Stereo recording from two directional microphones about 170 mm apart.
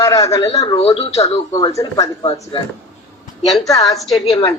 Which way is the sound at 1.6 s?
20° left (ahead or behind).